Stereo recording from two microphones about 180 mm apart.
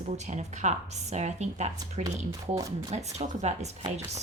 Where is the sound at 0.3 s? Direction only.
40° right (ahead or behind).